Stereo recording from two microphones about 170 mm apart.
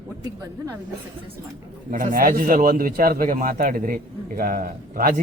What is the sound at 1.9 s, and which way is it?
Speech, 50° right (ahead or behind).